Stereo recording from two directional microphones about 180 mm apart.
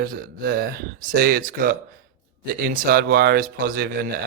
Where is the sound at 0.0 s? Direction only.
55° right (ahead or behind).